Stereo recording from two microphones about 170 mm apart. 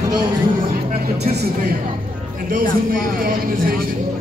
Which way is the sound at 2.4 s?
50° right (ahead or behind).